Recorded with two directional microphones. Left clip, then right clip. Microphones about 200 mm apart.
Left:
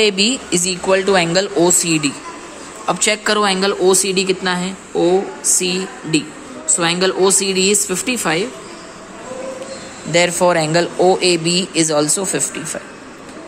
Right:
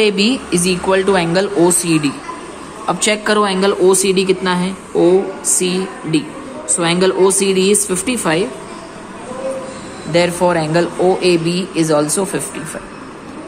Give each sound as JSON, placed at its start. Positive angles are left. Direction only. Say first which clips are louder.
{"t": 0.0, "sound": "speech", "louder": "right 1 dB", "side_deg": 10}
{"t": 10.1, "sound": "speech", "louder": "even", "side_deg": 20}